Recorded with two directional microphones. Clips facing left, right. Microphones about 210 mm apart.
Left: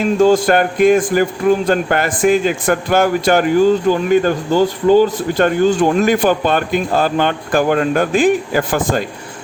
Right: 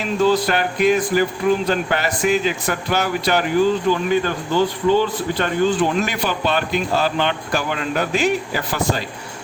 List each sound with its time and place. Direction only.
0.0 s speech: 45° left (ahead or behind)